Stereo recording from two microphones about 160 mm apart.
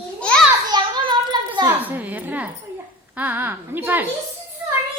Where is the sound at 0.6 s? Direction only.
25° right (ahead or behind).